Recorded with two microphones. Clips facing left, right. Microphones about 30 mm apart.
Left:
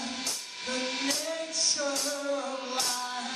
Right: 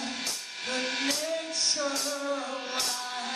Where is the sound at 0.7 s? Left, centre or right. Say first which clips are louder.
Right 1 dB; centre.